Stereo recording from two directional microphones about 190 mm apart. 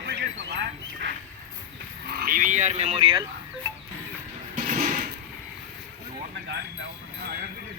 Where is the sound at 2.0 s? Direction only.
55° right (ahead or behind); by 3.2 s 30° right (ahead or behind).